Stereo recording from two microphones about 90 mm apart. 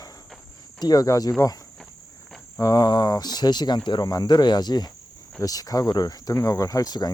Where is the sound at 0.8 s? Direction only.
45° left (ahead or behind).